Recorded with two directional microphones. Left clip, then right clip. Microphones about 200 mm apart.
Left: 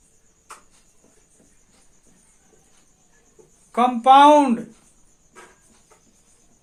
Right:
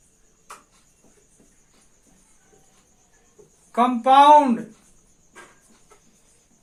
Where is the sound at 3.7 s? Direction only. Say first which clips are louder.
Left 2 dB; 30° left (ahead or behind).